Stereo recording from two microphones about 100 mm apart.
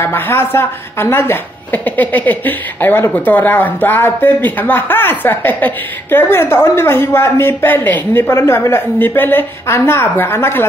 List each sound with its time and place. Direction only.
0.0 s a woman's voice: 25° left (ahead or behind)